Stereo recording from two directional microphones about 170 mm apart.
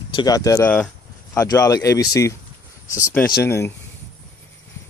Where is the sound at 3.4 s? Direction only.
15° left (ahead or behind).